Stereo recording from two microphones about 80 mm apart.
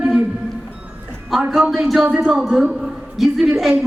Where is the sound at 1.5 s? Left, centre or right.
Centre.